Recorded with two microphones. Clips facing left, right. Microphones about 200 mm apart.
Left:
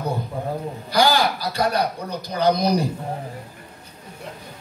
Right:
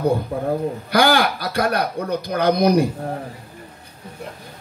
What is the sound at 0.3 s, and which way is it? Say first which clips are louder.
Speech: right 6 dB; 60° right (ahead or behind).